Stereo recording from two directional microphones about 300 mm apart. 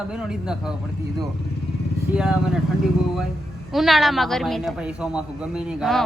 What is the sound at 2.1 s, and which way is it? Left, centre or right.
Speech, centre.